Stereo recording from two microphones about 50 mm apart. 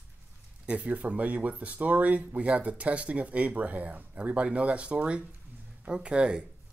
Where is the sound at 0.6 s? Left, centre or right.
Right.